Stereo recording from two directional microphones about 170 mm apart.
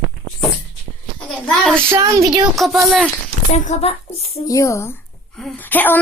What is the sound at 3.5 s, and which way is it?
Speech, 40° left (ahead or behind).